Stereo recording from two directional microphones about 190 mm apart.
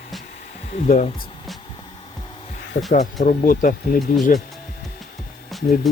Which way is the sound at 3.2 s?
45° left (ahead or behind).